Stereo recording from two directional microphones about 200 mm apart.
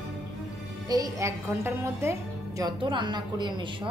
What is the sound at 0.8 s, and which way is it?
A woman's voice, 15° right (ahead or behind).